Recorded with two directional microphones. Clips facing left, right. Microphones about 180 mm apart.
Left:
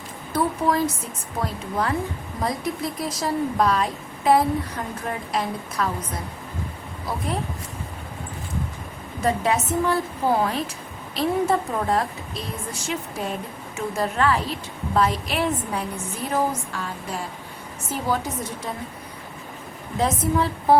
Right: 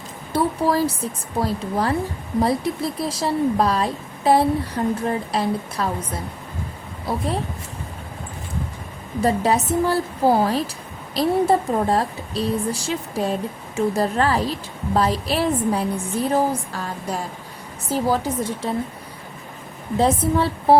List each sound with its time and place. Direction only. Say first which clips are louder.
0.3 s speech: right 2 dB; 35° right (ahead or behind)
9.2 s a woman's voice: right 3 dB; 35° right (ahead or behind)
20.0 s speech: right 3 dB; 30° right (ahead or behind)